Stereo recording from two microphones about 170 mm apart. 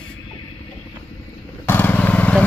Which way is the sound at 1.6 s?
10° left (ahead or behind).